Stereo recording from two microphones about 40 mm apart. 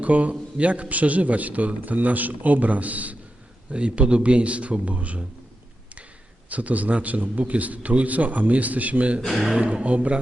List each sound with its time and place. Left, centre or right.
0.0 s a man's voice: right
3.7 s a man's voice: right
6.5 s a man's voice: right
9.2 s speech: centre
9.5 s speech: right